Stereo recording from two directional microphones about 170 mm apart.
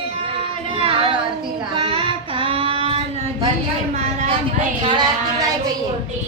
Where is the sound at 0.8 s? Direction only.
35° right (ahead or behind).